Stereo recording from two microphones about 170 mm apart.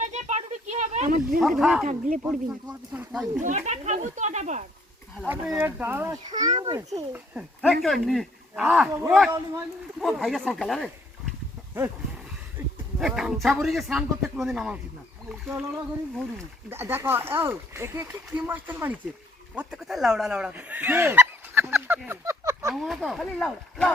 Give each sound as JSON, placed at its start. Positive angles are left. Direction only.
{"t": 0.0, "sound": "a sound", "side_deg": -45}
{"t": 1.4, "sound": "a man's voice", "side_deg": 0}
{"t": 1.9, "sound": "speech", "side_deg": -50}
{"t": 2.2, "sound": "speech", "side_deg": -10}
{"t": 3.4, "sound": "speech", "side_deg": -45}
{"t": 5.2, "sound": "speech", "side_deg": -5}
{"t": 6.3, "sound": "a child's voice", "side_deg": -25}
{"t": 7.6, "sound": "a man's voice", "side_deg": 0}
{"t": 13.0, "sound": "a man's voice", "side_deg": -5}
{"t": 16.6, "sound": "speech", "side_deg": -15}
{"t": 22.7, "sound": "a man's voice", "side_deg": 0}